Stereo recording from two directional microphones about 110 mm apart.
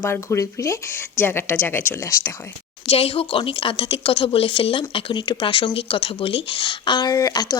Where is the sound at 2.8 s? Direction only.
65° left (ahead or behind).